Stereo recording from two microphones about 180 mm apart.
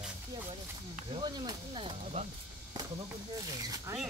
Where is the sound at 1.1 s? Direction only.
25° right (ahead or behind).